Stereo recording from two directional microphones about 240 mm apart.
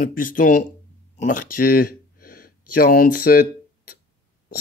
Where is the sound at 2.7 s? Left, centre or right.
Left.